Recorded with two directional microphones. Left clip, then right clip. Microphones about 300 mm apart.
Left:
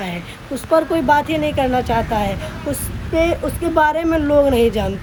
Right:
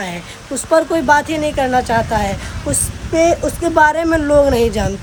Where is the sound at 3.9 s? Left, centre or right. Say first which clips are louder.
Right 3 dB; centre.